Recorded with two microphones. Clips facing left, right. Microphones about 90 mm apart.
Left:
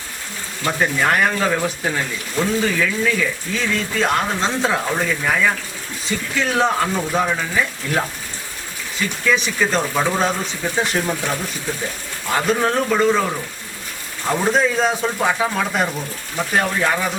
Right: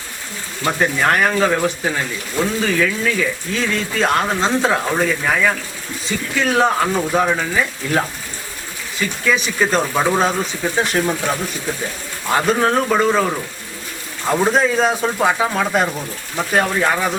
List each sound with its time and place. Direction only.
0.8 s speech: centre (ahead or behind)
9.2 s speech: 5° right (ahead or behind)
12.3 s speech: 5° right (ahead or behind)